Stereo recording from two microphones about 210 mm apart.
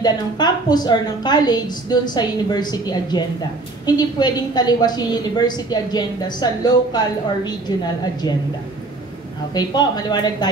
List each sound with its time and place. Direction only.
0.0 s a woman's voice: 20° left (ahead or behind)
9.5 s a woman's voice: 20° left (ahead or behind)